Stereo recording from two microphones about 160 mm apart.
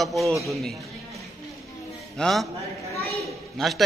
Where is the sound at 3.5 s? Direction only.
Centre (ahead or behind).